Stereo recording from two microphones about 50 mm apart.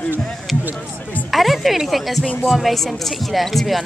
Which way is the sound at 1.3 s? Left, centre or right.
Centre.